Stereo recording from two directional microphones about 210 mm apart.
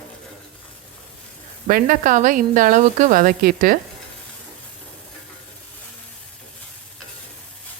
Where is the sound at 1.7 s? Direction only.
40° right (ahead or behind).